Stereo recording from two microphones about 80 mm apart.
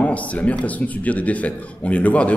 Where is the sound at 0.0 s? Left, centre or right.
Centre.